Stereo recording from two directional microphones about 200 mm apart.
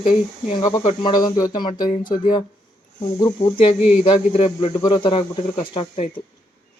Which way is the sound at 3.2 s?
25° left (ahead or behind).